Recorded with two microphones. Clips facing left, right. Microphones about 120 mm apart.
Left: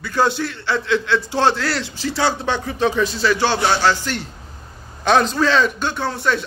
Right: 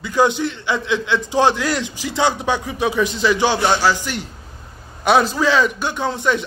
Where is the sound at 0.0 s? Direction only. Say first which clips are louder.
Right 2 dB; 15° right (ahead or behind).